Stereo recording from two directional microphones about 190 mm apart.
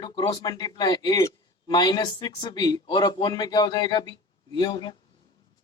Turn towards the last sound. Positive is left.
turn(degrees=20)  # may be behind; listen again after turning